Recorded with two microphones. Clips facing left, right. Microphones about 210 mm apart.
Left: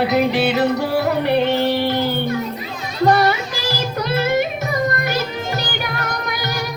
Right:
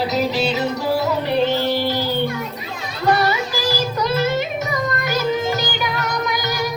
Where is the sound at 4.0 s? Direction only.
55° left (ahead or behind).